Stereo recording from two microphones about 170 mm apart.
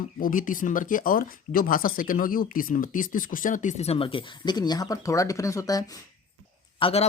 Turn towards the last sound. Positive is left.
turn(degrees=35)  # may be behind; listen again after turning